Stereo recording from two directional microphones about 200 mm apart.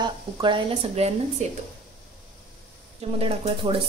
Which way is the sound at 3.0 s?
30° right (ahead or behind).